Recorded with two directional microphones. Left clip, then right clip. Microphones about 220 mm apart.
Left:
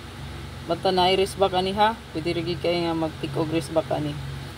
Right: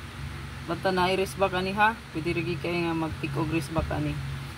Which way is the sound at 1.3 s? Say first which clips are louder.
Left 4 dB; 45° right (ahead or behind).